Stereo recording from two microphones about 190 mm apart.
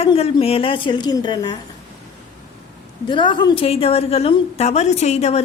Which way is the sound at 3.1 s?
25° left (ahead or behind).